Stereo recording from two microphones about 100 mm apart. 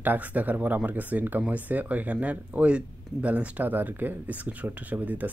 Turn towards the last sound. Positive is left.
turn(degrees=-15)  # may be behind; listen again after turning